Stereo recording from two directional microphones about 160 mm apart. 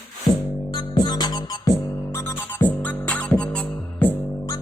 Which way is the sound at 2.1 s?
15° left (ahead or behind).